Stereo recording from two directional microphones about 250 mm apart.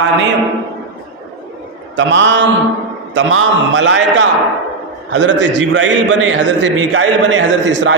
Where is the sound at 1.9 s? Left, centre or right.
Right.